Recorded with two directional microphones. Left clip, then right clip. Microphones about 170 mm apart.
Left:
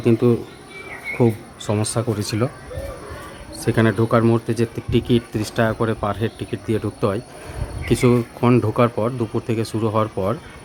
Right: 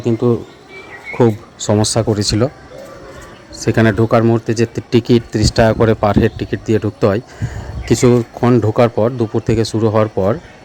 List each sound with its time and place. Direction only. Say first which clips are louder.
0.0 s speech: right 2 dB; 5° right (ahead or behind)
1.2 s speech: right 7 dB; 25° right (ahead or behind)
3.6 s speech: right 5 dB; 30° right (ahead or behind)
4.0 s speech: right 5 dB; 20° right (ahead or behind)